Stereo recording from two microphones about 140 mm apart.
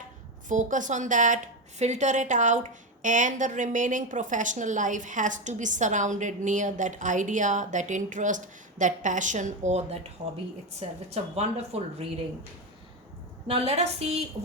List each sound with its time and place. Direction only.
0.4 s a woman's voice: 65° right (ahead or behind)
13.5 s a woman's voice: 50° right (ahead or behind)